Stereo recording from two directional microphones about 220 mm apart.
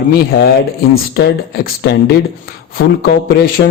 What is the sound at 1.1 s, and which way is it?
A man's voice, 50° left (ahead or behind).